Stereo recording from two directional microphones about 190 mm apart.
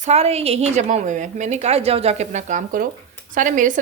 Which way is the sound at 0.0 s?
35° right (ahead or behind).